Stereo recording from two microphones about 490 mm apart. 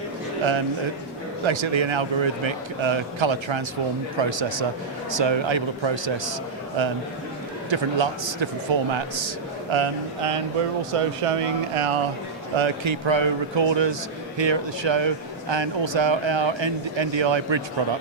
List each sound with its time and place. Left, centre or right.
1.5 s a man's voice: right
7.7 s a man's voice: right
9.7 s a man's voice: right
12.5 s a man's voice: right